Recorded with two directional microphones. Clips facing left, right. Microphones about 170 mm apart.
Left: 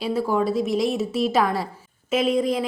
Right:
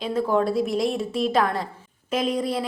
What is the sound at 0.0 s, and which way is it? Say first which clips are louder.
A woman's voice: even; 5° left (ahead or behind).